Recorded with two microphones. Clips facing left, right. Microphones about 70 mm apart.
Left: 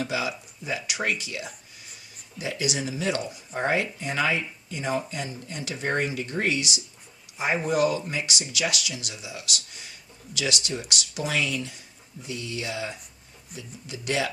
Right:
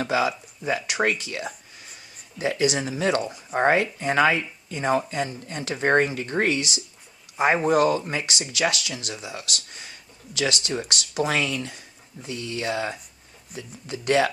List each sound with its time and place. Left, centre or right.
0.0 s speech: right
7.3 s speech: right
7.6 s speech: right